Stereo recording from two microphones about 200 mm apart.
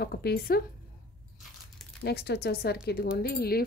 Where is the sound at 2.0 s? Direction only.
55° left (ahead or behind).